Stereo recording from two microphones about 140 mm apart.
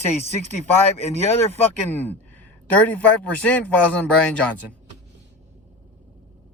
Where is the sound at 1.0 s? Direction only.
50° left (ahead or behind).